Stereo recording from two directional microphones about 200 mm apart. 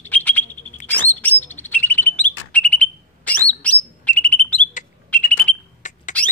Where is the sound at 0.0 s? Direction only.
10° left (ahead or behind).